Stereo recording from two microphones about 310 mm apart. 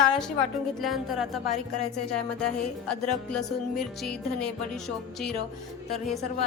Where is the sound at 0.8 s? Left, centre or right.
Centre.